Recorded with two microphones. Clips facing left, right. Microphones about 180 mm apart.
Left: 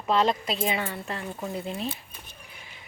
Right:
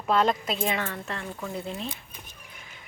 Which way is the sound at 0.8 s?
15° left (ahead or behind).